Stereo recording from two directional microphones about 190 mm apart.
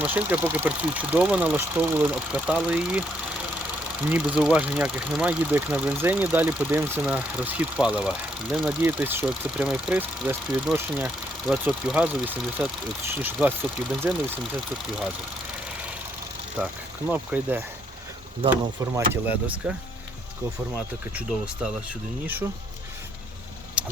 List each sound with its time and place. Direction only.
0.0 s speech: 10° right (ahead or behind)
4.0 s speech: 5° right (ahead or behind)
16.6 s speech: 5° right (ahead or behind)
18.9 s speech: 10° right (ahead or behind)
23.8 s vehicle: 5° right (ahead or behind)